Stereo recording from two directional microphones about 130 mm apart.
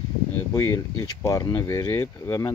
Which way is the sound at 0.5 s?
25° left (ahead or behind).